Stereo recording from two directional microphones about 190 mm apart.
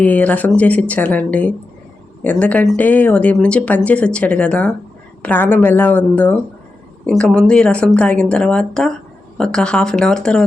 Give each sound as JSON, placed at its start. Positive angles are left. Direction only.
{"t": 0.0, "sound": "speech", "side_deg": 10}